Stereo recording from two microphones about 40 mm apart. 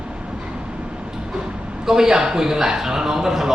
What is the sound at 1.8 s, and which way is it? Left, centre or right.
A man's voice, centre.